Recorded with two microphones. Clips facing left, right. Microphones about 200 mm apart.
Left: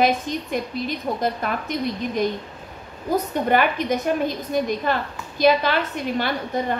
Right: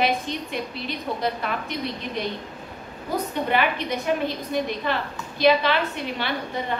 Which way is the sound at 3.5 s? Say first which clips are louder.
Left 5 dB; 45° left (ahead or behind).